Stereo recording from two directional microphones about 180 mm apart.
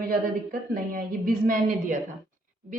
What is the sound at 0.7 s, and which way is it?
A woman's voice, 50° right (ahead or behind).